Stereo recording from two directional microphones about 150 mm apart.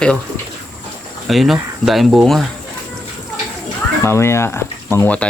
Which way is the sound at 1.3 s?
Centre (ahead or behind).